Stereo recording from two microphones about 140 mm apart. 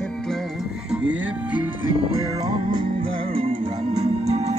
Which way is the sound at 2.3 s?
35° right (ahead or behind).